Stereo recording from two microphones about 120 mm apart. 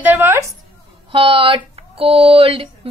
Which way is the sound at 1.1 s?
50° right (ahead or behind).